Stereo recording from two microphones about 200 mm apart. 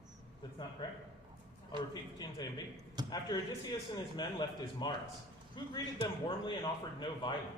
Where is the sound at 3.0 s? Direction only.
20° right (ahead or behind).